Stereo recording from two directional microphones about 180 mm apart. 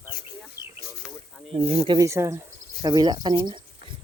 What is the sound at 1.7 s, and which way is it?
Speech, 20° right (ahead or behind).